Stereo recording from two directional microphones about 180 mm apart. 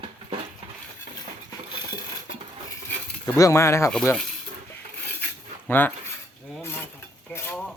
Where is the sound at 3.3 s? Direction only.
15° left (ahead or behind).